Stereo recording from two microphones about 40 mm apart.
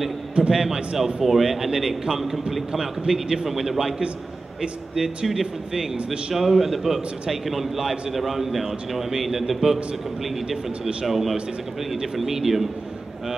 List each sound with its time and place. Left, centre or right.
0.4 s a man's voice: right
0.9 s a man's voice: centre